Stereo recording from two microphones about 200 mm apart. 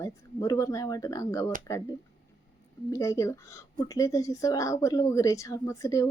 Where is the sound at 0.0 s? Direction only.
15° left (ahead or behind).